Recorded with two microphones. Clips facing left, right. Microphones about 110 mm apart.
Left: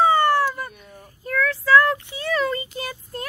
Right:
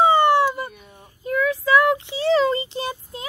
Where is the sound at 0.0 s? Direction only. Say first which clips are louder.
Right 2 dB; 20° right (ahead or behind).